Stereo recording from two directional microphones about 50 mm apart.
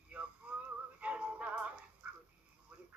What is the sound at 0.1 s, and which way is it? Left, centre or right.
Synthetic singing, right.